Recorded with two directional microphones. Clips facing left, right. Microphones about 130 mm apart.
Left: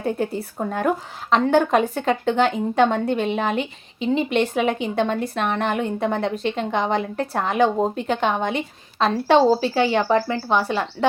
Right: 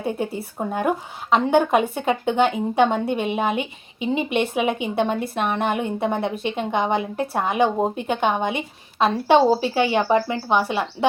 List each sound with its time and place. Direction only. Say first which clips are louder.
0.0 s a woman's voice: left 2 dB; 5° right (ahead or behind)